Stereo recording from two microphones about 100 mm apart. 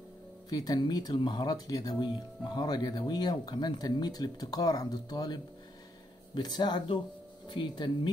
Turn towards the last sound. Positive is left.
turn(degrees=50)  # may be behind; listen again after turning